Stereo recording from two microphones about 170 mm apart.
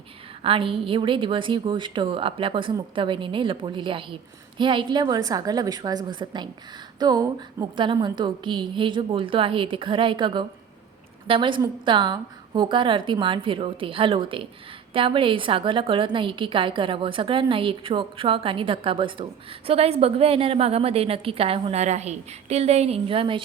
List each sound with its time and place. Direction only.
0.4 s a woman's voice: 30° right (ahead or behind)